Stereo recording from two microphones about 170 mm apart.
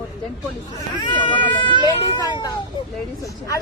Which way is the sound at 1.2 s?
30° left (ahead or behind).